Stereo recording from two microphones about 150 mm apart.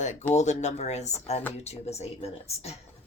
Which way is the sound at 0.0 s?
55° left (ahead or behind).